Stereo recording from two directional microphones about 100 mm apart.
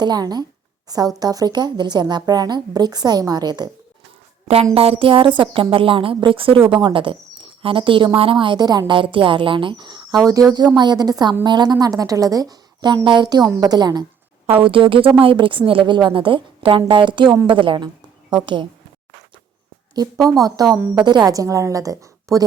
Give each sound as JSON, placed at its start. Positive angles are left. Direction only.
{"t": 0.0, "sound": "a woman's voice", "side_deg": -45}
{"t": 4.7, "sound": "a woman's voice", "side_deg": -75}
{"t": 8.9, "sound": "a woman's voice", "side_deg": -55}
{"t": 10.2, "sound": "a woman's voice", "side_deg": -35}
{"t": 14.6, "sound": "a woman's voice", "side_deg": -60}
{"t": 20.0, "sound": "a woman's voice", "side_deg": -35}